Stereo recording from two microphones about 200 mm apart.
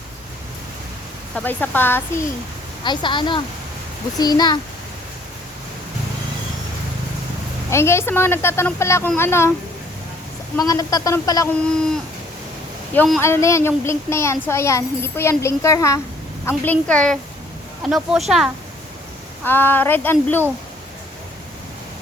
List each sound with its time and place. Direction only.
1.4 s a child's voice: 10° left (ahead or behind)
2.8 s speech: 25° left (ahead or behind)
7.7 s a child's voice: 15° left (ahead or behind)
10.6 s a child's voice: 20° left (ahead or behind)
12.9 s a child's voice: 10° left (ahead or behind)
19.5 s a child's voice: 10° left (ahead or behind)